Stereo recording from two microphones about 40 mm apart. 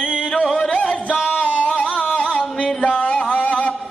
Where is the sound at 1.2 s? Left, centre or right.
Left.